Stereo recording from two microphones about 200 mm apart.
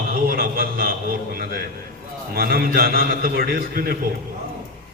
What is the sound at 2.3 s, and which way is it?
A man's voice, 45° right (ahead or behind).